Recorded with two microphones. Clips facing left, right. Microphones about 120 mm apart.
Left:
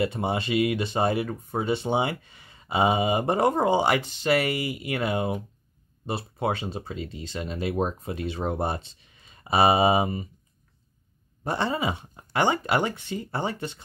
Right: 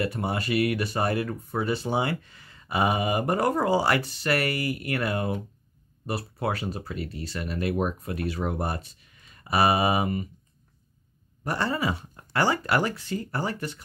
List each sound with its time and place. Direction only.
0.0 s speech: 20° left (ahead or behind)
11.4 s speech: 25° left (ahead or behind)